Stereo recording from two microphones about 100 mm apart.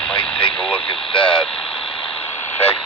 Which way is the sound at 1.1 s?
10° left (ahead or behind).